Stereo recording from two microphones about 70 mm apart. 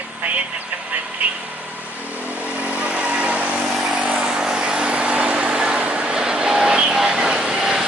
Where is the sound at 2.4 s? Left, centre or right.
Right.